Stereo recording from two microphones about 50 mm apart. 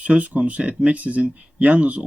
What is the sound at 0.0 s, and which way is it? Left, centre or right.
Speech, right.